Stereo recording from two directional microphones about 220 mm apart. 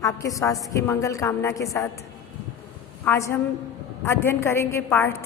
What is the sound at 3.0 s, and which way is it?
A woman's voice, 10° left (ahead or behind).